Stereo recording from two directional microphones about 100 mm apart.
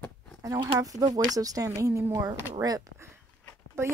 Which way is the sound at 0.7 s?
35° right (ahead or behind).